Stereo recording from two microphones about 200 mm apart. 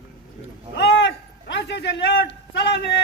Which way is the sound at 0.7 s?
65° left (ahead or behind).